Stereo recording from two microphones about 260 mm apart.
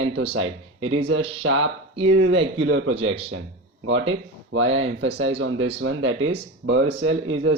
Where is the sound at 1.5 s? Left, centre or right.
Right.